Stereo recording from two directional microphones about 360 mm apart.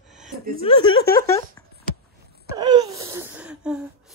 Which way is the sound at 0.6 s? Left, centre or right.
Centre.